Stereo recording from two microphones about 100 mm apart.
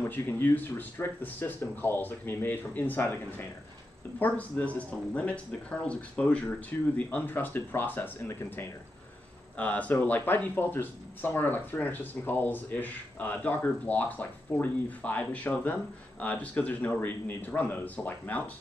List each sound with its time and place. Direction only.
0.0 s speech: 20° left (ahead or behind)
9.6 s speech: 15° left (ahead or behind)